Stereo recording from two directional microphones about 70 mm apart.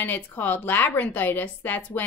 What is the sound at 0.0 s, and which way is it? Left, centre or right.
A woman's voice, left.